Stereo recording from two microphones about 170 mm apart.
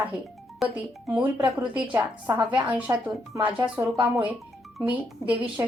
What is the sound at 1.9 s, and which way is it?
Speech, 10° right (ahead or behind).